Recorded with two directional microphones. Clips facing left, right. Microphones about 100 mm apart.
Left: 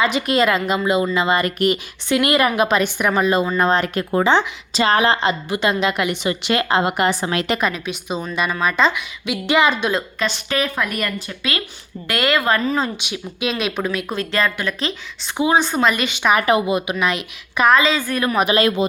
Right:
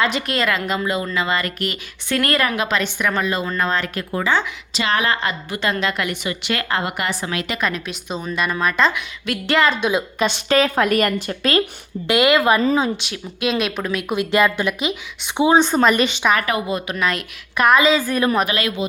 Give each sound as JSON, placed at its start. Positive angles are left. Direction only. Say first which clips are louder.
{"t": 0.0, "sound": "a woman's voice", "louder": "left 3 dB", "side_deg": 5}
{"t": 0.9, "sound": "a woman's voice", "louder": "left 6 dB", "side_deg": 20}
{"t": 4.7, "sound": "a woman's voice", "louder": "left 4 dB", "side_deg": 35}
{"t": 7.6, "sound": "a woman's voice", "louder": "left 2 dB", "side_deg": 5}
{"t": 9.8, "sound": "a woman's voice", "louder": "right 2 dB", "side_deg": -15}
{"t": 11.0, "sound": "speech", "louder": "right 5 dB", "side_deg": -40}
{"t": 12.0, "sound": "a woman's voice", "louder": "right 4 dB", "side_deg": -20}
{"t": 13.0, "sound": "a woman's voice", "louder": "even", "side_deg": 5}
{"t": 14.1, "sound": "speech", "louder": "right 3 dB", "side_deg": -15}
{"t": 15.4, "sound": "a woman's voice", "louder": "right 2 dB", "side_deg": -25}
{"t": 16.3, "sound": "a woman's voice", "louder": "left 4 dB", "side_deg": 20}
{"t": 18.1, "sound": "a woman's voice", "louder": "right 2 dB", "side_deg": -20}
{"t": 18.4, "sound": "speech", "louder": "left 5 dB", "side_deg": 30}